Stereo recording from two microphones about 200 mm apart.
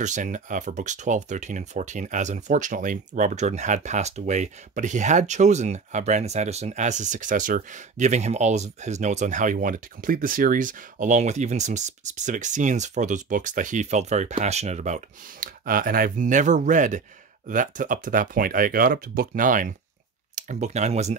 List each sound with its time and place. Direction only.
0.0 s speech: 40° right (ahead or behind)